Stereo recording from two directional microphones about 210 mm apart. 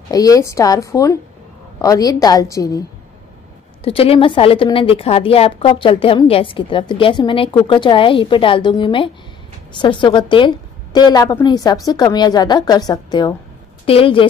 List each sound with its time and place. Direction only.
0.1 s a woman's voice: 15° left (ahead or behind)
3.8 s a woman's voice: 25° left (ahead or behind)